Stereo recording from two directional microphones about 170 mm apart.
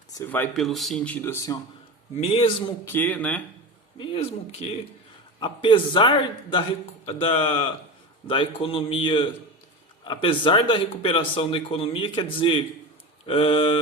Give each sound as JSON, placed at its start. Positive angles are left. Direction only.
{"t": 0.1, "sound": "speech", "side_deg": 15}
{"t": 0.5, "sound": "speech", "side_deg": 0}
{"t": 2.8, "sound": "speech", "side_deg": 10}
{"t": 3.9, "sound": "a man's voice", "side_deg": 30}